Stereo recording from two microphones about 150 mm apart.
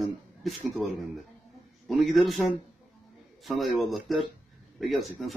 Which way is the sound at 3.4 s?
Centre (ahead or behind).